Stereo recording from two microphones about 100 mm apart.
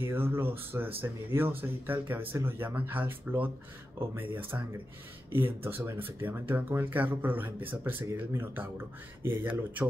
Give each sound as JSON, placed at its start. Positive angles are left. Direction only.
{"t": 0.0, "sound": "speech", "side_deg": -20}